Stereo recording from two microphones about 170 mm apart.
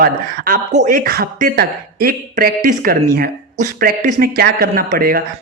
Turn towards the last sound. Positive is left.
turn(degrees=-60)  # may be behind; listen again after turning